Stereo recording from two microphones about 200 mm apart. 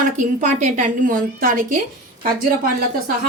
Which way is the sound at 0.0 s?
40° right (ahead or behind).